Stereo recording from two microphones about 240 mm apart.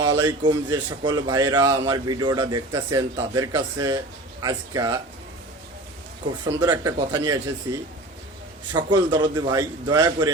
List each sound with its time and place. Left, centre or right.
0.2 s a man's voice: centre
6.5 s a man's voice: centre
8.7 s a man's voice: centre